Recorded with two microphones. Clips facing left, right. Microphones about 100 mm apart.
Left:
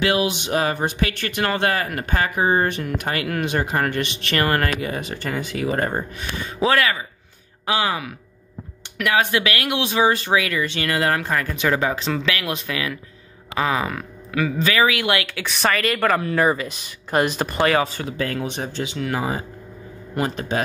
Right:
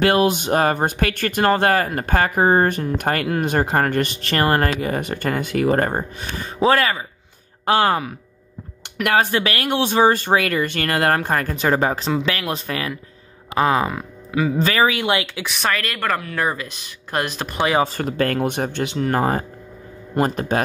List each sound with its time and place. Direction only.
0.0 s speech: 45° right (ahead or behind)
5.9 s speech: 35° right (ahead or behind)
7.6 s speech: 45° right (ahead or behind); by 14.5 s 25° right (ahead or behind)
14.6 s speech: 35° right (ahead or behind)
15.1 s speech: 20° right (ahead or behind)
15.4 s speech: centre (ahead or behind)
17.9 s speech: 60° right (ahead or behind)
18.9 s speech: 45° right (ahead or behind)